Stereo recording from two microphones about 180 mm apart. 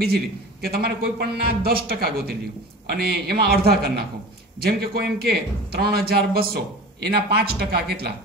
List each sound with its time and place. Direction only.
0.7 s a man's voice: 60° right (ahead or behind)